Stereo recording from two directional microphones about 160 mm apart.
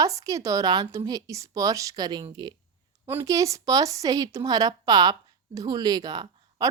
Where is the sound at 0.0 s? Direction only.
20° right (ahead or behind).